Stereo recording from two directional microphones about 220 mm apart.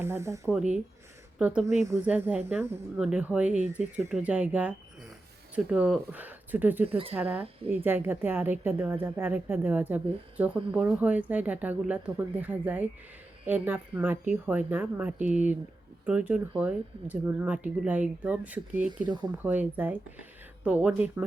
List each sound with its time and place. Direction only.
0.0 s a woman's voice: 10° right (ahead or behind)
19.0 s speech: 20° right (ahead or behind)
19.4 s a woman's voice: 10° right (ahead or behind)